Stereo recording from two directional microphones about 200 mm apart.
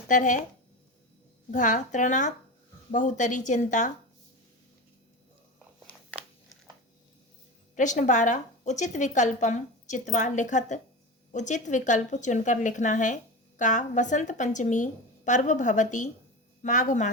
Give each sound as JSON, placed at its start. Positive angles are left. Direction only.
{"t": 0.1, "sound": "a woman's voice", "side_deg": 40}
{"t": 1.5, "sound": "a woman's voice", "side_deg": 40}
{"t": 7.8, "sound": "a woman's voice", "side_deg": 40}